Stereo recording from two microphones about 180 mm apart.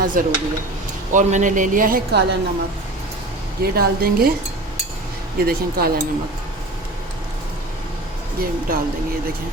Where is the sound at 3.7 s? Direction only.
55° right (ahead or behind).